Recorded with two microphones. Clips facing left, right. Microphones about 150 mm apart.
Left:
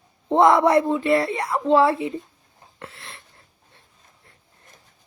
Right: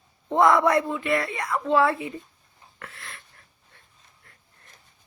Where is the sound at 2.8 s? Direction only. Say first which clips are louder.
Left 3 dB; 25° left (ahead or behind).